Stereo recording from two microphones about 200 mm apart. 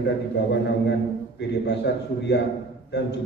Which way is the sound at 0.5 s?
60° left (ahead or behind).